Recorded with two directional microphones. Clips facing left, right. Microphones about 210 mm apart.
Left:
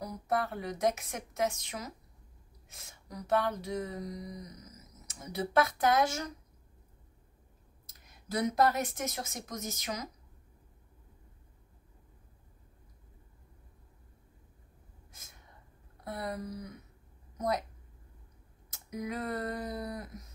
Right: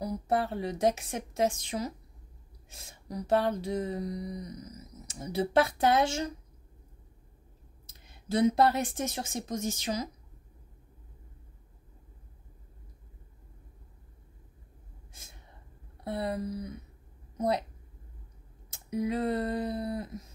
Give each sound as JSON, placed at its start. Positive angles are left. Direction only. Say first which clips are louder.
{"t": 0.0, "sound": "a woman's voice", "louder": "right 4 dB", "side_deg": -30}
{"t": 7.8, "sound": "speech", "louder": "right 6 dB", "side_deg": -30}
{"t": 16.0, "sound": "a woman's voice", "louder": "right 5 dB", "side_deg": -30}
{"t": 18.7, "sound": "a woman's voice", "louder": "right 7 dB", "side_deg": -30}